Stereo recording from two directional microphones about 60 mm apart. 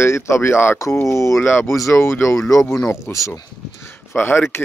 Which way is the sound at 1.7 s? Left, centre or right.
Left.